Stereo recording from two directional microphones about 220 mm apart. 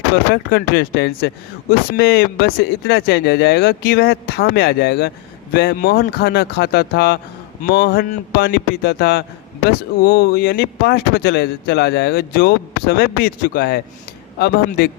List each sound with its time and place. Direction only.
0.5 s speech: 45° left (ahead or behind)